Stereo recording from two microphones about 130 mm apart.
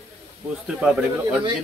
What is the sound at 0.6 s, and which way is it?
Speech, 10° right (ahead or behind).